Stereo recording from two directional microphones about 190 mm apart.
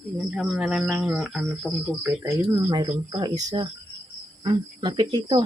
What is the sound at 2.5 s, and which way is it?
Speech, 20° right (ahead or behind).